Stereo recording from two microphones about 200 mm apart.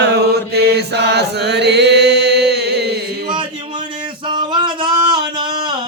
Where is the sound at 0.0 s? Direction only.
55° right (ahead or behind).